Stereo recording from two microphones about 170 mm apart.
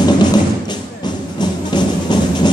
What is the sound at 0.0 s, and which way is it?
Music, 25° left (ahead or behind).